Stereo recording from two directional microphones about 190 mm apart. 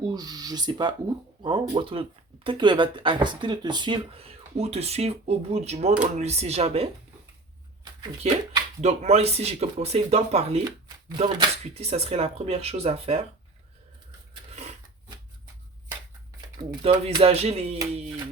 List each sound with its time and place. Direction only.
0.0 s speech: 20° right (ahead or behind)
8.2 s speech: 35° right (ahead or behind)
10.6 s shuffling cards: 20° right (ahead or behind)
11.2 s speech: 25° right (ahead or behind)
14.5 s a sound: 35° right (ahead or behind)
16.6 s speech: 30° right (ahead or behind)